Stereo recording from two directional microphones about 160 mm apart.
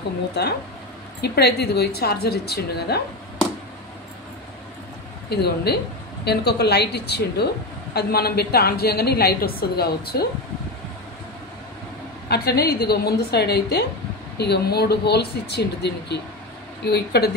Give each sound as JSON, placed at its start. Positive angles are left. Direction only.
{"t": 0.3, "sound": "speech", "side_deg": 90}
{"t": 5.3, "sound": "a woman's voice", "side_deg": 85}
{"t": 7.9, "sound": "a woman's voice", "side_deg": 75}
{"t": 12.3, "sound": "a woman's voice", "side_deg": 75}